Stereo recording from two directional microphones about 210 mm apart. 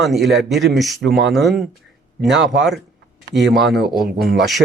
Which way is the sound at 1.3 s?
Centre (ahead or behind).